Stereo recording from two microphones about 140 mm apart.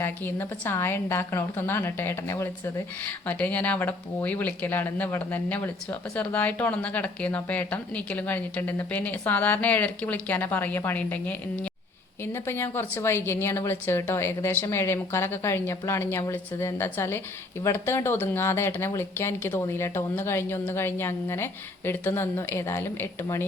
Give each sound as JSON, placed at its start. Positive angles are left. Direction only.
{"t": 0.0, "sound": "speech", "side_deg": 15}